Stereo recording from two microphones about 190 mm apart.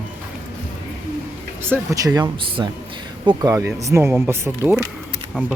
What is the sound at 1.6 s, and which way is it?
Speech, 15° right (ahead or behind).